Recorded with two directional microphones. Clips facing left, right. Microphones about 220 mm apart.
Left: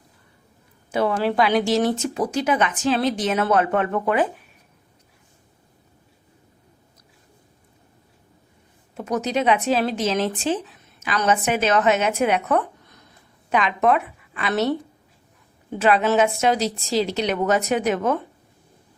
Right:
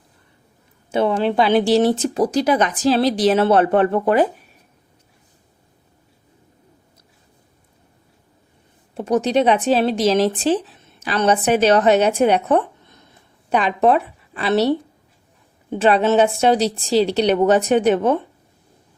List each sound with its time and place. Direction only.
0.9 s speech: 25° right (ahead or behind)
9.0 s a woman's voice: 30° right (ahead or behind)